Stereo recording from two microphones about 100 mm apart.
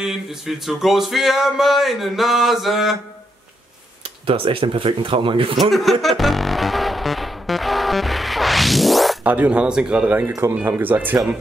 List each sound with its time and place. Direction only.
0.0 s a sound: 5° right (ahead or behind)
4.3 s speech: 65° right (ahead or behind)
5.6 s music: centre (ahead or behind)
9.2 s speech: 15° right (ahead or behind)